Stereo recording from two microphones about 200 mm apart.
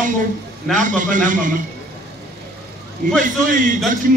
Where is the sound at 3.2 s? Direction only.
40° right (ahead or behind).